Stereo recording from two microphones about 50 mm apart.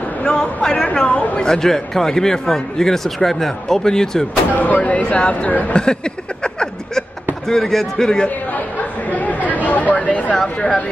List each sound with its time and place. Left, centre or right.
0.4 s speech: centre
1.4 s speech: centre
4.6 s speech: left
6.4 s a sound: centre
7.4 s speech: centre
9.1 s chatter: left
9.7 s speech: left
10.3 s speech: centre